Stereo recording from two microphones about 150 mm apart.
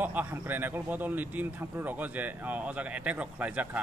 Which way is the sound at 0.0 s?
10° right (ahead or behind).